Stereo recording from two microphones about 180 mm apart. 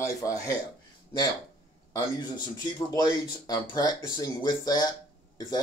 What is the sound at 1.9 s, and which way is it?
Speech, 25° left (ahead or behind).